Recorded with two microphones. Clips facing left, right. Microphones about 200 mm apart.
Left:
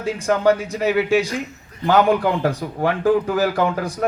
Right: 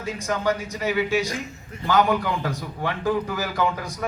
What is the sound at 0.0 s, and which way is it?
A man's voice, 60° left (ahead or behind).